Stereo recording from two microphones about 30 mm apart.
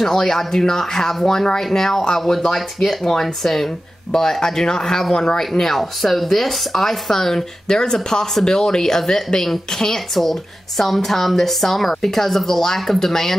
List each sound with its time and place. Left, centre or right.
0.0 s speech: centre
5.4 s speech: centre